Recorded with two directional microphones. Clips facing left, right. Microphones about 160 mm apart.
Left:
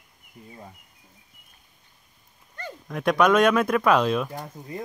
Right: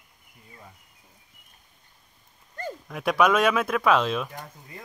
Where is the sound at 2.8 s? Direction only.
5° right (ahead or behind).